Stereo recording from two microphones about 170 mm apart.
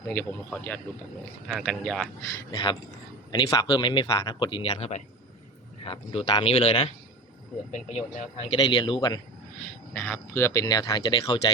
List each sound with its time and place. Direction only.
0.1 s speech: 10° left (ahead or behind)
1.5 s speech: centre (ahead or behind)
2.5 s speech: 30° left (ahead or behind)
8.5 s speech: 25° left (ahead or behind)
9.9 s speech: 10° left (ahead or behind); by 11.5 s 25° left (ahead or behind)